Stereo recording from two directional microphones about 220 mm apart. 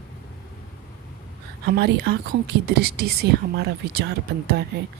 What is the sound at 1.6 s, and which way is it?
Speech, 45° right (ahead or behind).